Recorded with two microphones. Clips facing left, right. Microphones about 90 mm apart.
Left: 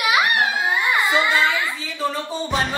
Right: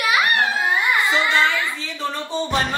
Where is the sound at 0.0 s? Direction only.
15° left (ahead or behind).